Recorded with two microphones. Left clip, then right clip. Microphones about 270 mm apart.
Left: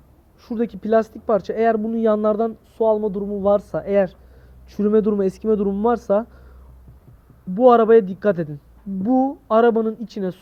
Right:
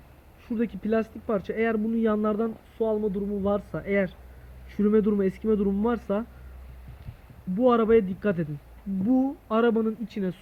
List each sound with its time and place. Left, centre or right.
0.4 s speech: centre
7.6 s speech: centre